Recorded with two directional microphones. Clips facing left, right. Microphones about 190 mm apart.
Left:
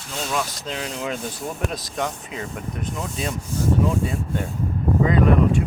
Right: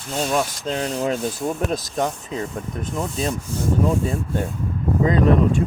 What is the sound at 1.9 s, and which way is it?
Speech, 35° right (ahead or behind).